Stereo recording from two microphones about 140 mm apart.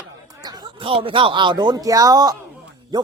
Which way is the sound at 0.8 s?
40° right (ahead or behind).